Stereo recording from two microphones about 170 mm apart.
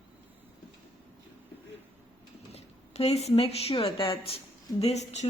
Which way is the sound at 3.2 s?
35° left (ahead or behind).